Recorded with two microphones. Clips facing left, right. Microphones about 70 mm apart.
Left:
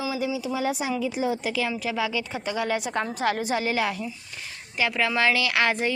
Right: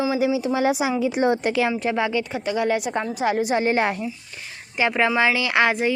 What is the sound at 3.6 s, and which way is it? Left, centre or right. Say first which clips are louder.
Speech: right 5 dB; right.